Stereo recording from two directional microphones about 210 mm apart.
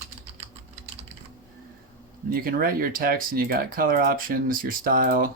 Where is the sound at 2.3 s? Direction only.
45° right (ahead or behind).